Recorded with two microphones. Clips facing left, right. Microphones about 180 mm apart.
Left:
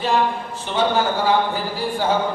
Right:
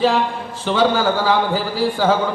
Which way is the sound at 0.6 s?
90° right.